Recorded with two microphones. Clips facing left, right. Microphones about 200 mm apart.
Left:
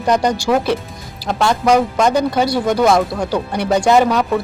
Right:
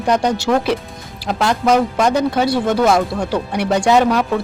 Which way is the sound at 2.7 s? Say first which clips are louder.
Left 1 dB; 5° right (ahead or behind).